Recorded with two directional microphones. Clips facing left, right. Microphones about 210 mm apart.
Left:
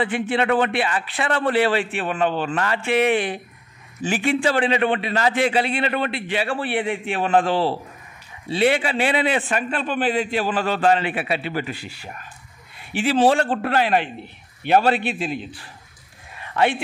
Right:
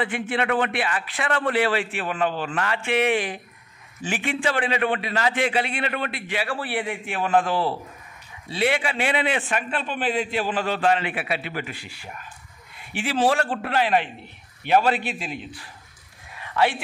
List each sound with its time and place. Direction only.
0.0 s a man's voice: 30° left (ahead or behind)
12.9 s a man's voice: 30° left (ahead or behind)
13.6 s a man's voice: 45° left (ahead or behind)
14.7 s a man's voice: 30° left (ahead or behind)